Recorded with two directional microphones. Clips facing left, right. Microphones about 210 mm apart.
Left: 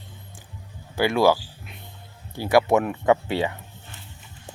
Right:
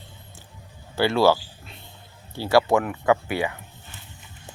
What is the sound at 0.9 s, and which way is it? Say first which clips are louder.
Speech: even; 15° left (ahead or behind).